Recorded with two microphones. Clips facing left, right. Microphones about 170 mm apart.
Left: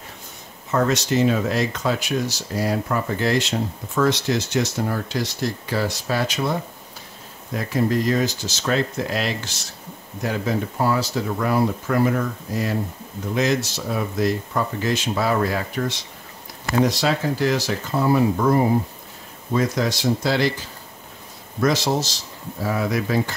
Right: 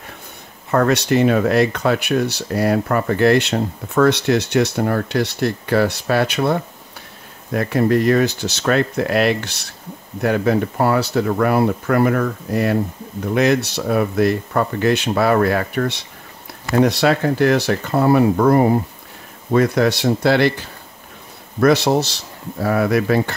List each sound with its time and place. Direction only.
0.7 s speech: 60° right (ahead or behind)